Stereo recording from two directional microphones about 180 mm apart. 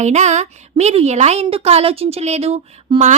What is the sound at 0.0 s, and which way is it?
A woman's voice, 40° right (ahead or behind).